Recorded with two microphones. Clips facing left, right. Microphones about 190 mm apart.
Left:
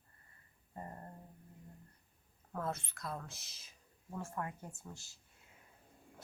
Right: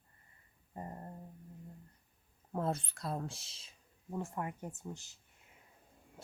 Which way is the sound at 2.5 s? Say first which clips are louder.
Right 5 dB; 30° right (ahead or behind).